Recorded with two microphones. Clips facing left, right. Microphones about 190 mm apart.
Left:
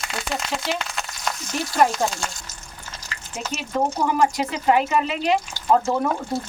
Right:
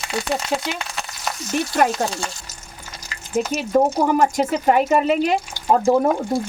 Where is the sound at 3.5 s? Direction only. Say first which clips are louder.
Right 5 dB; 40° right (ahead or behind).